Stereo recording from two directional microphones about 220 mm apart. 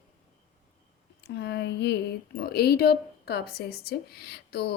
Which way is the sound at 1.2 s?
50° left (ahead or behind).